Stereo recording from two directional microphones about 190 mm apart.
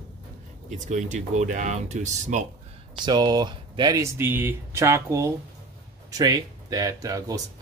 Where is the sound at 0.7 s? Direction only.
40° right (ahead or behind).